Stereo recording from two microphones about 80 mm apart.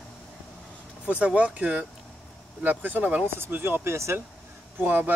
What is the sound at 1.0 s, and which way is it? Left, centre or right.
Speech, centre.